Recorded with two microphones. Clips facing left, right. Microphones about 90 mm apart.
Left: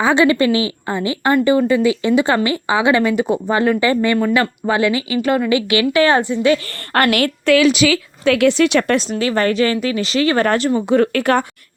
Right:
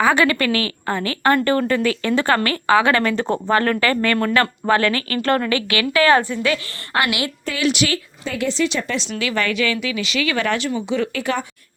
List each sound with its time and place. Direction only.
0.0 s a woman's voice: 25° left (ahead or behind)
6.9 s a woman's voice: 50° left (ahead or behind)
7.5 s a woman's voice: 70° left (ahead or behind)
9.0 s speech: 35° left (ahead or behind); by 11.4 s 60° left (ahead or behind)